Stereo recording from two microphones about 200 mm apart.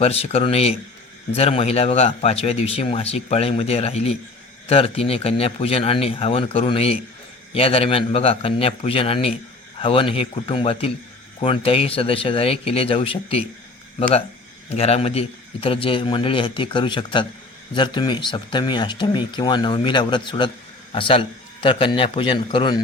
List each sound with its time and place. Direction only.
0.0 s speech: 30° left (ahead or behind)
14.7 s speech: 30° left (ahead or behind)